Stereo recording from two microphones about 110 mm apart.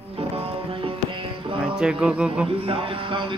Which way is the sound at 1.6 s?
10° right (ahead or behind).